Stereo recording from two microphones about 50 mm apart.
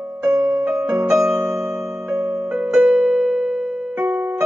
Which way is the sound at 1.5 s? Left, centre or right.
Centre.